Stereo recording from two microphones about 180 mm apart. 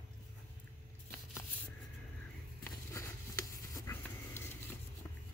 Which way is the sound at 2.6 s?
15° left (ahead or behind).